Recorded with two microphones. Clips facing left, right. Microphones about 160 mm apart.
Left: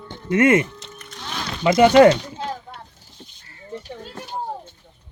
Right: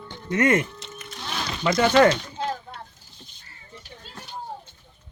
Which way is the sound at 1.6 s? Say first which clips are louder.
Left 6 dB; 15° left (ahead or behind).